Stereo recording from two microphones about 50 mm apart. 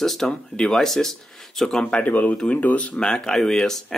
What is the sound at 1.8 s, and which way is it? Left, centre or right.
Speech, left.